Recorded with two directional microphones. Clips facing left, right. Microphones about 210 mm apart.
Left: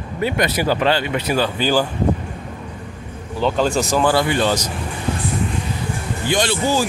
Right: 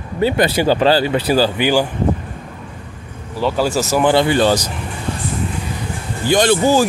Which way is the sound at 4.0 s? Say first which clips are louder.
Right 5 dB; 25° right (ahead or behind).